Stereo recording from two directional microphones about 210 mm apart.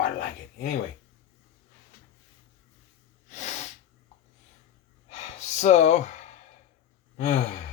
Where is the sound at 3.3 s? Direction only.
35° left (ahead or behind).